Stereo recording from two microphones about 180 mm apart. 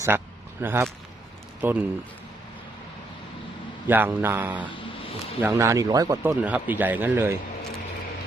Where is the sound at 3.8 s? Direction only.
10° right (ahead or behind).